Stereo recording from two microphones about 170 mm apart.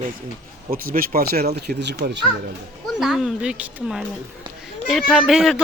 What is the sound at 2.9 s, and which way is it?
Speech, centre (ahead or behind).